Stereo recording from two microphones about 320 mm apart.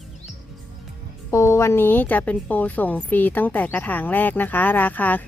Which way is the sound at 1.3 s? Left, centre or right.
Centre.